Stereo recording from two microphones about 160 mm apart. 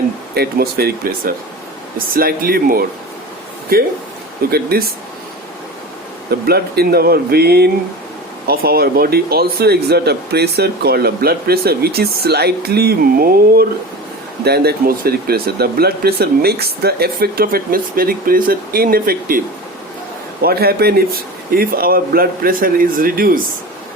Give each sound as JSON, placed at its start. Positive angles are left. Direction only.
{"t": 0.3, "sound": "speech", "side_deg": -75}
{"t": 6.4, "sound": "speech", "side_deg": -75}
{"t": 14.4, "sound": "speech", "side_deg": -85}
{"t": 20.4, "sound": "speech", "side_deg": -75}
{"t": 21.5, "sound": "speech", "side_deg": -65}